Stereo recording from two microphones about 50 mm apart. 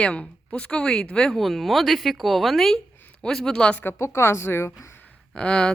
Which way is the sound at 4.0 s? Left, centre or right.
Left.